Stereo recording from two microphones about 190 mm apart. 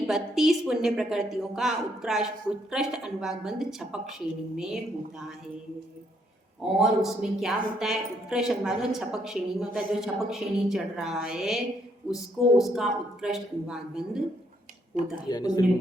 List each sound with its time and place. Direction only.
0.1 s a woman's voice: centre (ahead or behind)
6.6 s a woman's voice: 5° right (ahead or behind)
15.3 s speech: 20° left (ahead or behind)